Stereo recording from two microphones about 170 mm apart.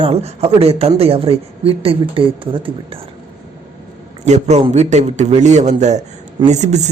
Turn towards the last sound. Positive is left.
turn(degrees=-40)  # may be behind; listen again after turning